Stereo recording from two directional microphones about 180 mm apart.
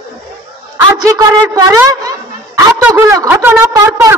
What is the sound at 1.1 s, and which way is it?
A woman's voice, 20° right (ahead or behind).